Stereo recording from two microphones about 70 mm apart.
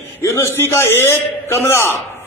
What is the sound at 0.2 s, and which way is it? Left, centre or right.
A man's voice, left.